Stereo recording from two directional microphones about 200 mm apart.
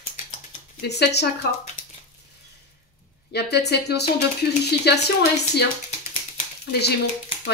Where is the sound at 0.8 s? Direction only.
55° left (ahead or behind).